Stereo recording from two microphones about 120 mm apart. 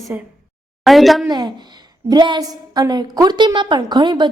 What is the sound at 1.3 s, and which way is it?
A woman's voice, 35° right (ahead or behind).